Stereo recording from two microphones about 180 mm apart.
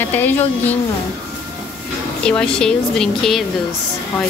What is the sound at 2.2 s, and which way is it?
A woman's voice, 5° left (ahead or behind).